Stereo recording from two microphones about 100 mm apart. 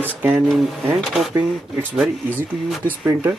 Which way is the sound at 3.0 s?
20° right (ahead or behind).